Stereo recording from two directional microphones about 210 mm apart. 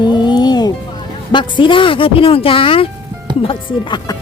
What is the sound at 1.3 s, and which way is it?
Speech, 20° left (ahead or behind).